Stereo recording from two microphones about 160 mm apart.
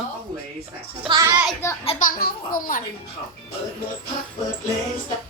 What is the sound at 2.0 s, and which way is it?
Speech, 65° left (ahead or behind).